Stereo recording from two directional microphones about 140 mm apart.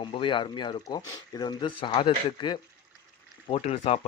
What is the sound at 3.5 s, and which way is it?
Speech, 45° left (ahead or behind).